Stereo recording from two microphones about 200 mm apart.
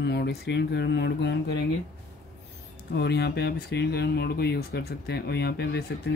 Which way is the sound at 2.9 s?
55° left (ahead or behind).